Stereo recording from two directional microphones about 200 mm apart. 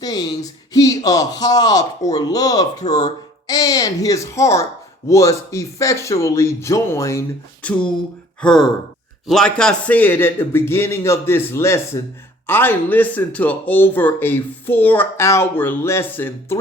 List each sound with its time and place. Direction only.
0.0 s speech: 20° left (ahead or behind)